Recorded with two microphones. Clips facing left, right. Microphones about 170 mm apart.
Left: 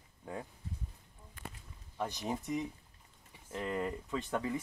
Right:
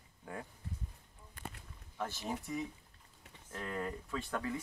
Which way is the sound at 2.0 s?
15° left (ahead or behind).